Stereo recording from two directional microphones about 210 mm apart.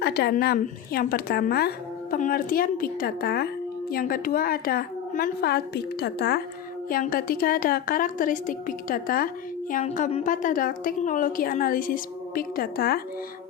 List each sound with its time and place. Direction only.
0.0 s a woman's voice: 50° left (ahead or behind)